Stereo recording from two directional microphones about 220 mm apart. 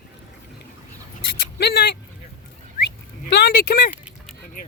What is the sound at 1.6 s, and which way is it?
Speech, 50° left (ahead or behind).